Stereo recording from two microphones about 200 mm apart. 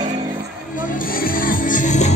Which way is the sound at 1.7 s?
35° left (ahead or behind).